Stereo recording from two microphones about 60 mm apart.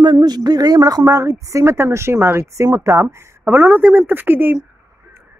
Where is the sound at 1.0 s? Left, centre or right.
Right.